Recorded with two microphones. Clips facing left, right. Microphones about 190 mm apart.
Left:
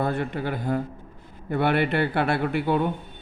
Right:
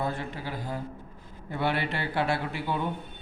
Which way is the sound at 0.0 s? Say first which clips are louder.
Left 6 dB; 60° left (ahead or behind).